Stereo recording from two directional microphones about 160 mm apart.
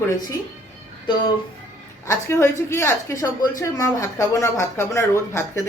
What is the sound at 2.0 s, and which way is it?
Speech, 20° left (ahead or behind).